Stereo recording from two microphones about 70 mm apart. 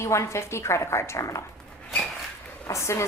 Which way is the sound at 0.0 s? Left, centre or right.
Left.